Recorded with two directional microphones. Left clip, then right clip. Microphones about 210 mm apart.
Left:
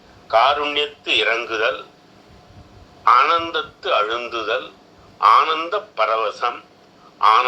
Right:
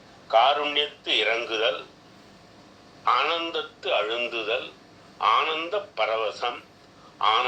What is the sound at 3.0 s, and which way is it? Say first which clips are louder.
A man's voice: left 9 dB; 30° left (ahead or behind).